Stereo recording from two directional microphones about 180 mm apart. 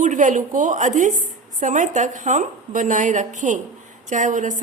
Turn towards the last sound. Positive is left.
turn(degrees=-45)  # may be behind; listen again after turning